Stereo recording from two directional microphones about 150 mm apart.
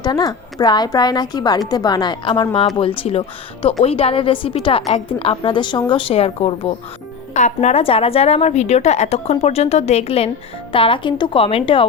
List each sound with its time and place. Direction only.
0.0 s a woman's voice: 25° left (ahead or behind)